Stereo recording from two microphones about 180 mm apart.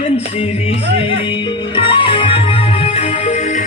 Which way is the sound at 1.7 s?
30° left (ahead or behind).